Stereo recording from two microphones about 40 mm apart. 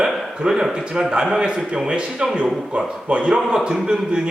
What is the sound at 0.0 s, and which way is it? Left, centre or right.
A man's voice, centre.